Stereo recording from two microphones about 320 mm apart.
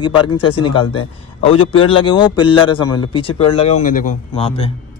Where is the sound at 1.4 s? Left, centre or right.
Centre.